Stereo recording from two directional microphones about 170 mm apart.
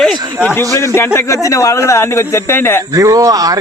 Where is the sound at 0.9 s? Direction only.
15° left (ahead or behind).